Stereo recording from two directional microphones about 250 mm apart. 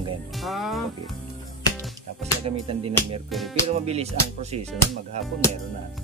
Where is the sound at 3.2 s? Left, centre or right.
Centre.